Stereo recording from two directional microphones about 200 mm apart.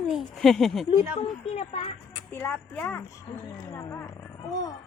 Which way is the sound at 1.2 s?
30° left (ahead or behind).